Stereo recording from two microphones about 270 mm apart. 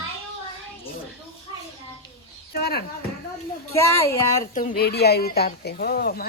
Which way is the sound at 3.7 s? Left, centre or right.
Centre.